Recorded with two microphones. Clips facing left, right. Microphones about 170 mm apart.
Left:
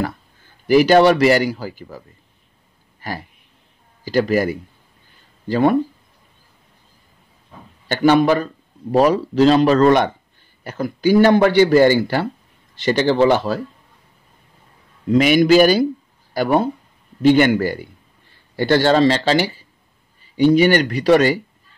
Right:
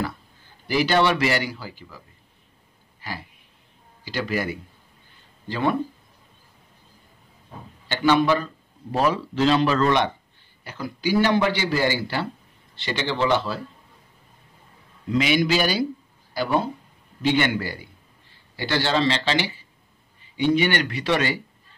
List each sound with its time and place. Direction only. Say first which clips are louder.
0.7 s a man's voice: left 9 dB; 45° left (ahead or behind)
7.9 s a man's voice: left 5 dB; 50° left (ahead or behind)
15.0 s a man's voice: left 8 dB; 50° left (ahead or behind)